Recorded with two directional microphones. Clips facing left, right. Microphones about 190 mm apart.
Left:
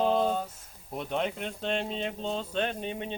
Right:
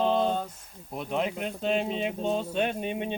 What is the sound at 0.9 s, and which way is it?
Speech, centre (ahead or behind).